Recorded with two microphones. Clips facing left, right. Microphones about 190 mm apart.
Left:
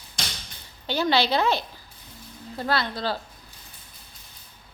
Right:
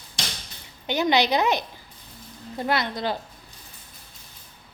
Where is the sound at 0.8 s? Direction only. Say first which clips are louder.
Right 1 dB; 20° right (ahead or behind).